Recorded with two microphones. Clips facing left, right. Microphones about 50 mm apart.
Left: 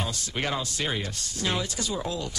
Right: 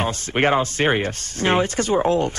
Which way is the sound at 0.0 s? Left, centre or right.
Right.